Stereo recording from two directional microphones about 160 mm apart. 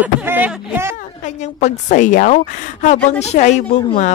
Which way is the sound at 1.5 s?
50° left (ahead or behind).